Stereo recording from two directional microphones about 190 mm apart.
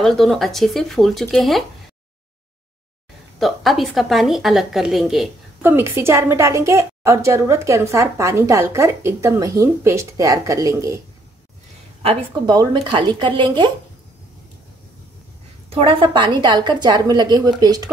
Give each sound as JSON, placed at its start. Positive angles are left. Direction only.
{"t": 0.0, "sound": "a woman's voice", "side_deg": 0}
{"t": 3.3, "sound": "a woman's voice", "side_deg": 0}
{"t": 5.6, "sound": "a woman's voice", "side_deg": -10}
{"t": 12.0, "sound": "a woman's voice", "side_deg": -30}
{"t": 15.7, "sound": "a woman's voice", "side_deg": -30}